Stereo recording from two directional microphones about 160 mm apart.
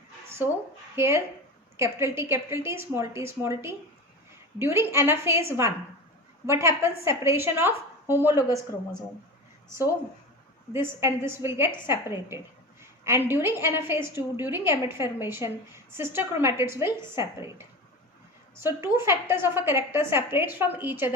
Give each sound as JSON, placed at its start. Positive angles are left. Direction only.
{"t": 0.3, "sound": "a sound", "side_deg": -15}
{"t": 0.9, "sound": "a woman's voice", "side_deg": -15}
{"t": 8.4, "sound": "a woman's voice", "side_deg": 20}
{"t": 10.7, "sound": "a woman's voice", "side_deg": -15}
{"t": 12.8, "sound": "a woman's voice", "side_deg": -15}